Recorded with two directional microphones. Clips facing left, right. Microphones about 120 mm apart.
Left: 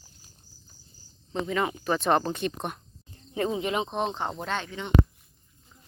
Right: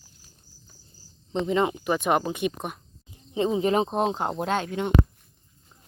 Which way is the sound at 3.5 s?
35° right (ahead or behind).